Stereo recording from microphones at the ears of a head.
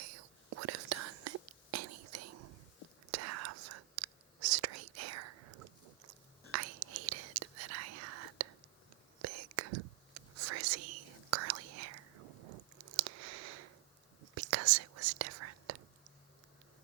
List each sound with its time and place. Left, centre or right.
0.0 s whispering: right